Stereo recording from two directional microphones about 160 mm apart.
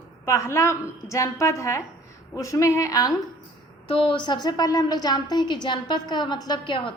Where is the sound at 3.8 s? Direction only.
35° left (ahead or behind).